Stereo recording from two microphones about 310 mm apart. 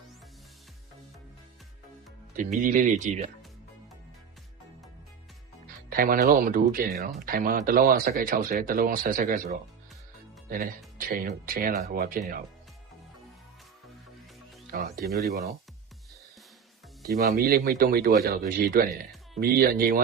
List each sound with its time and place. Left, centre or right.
2.3 s speech: right
5.9 s speech: right
10.9 s speech: right
14.7 s speech: right
17.0 s speech: right